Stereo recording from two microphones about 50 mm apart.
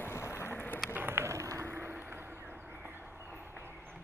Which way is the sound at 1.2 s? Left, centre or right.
Right.